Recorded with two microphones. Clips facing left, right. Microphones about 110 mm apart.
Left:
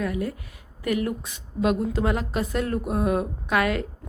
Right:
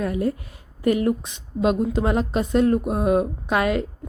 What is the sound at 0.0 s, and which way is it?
Speech, 30° right (ahead or behind).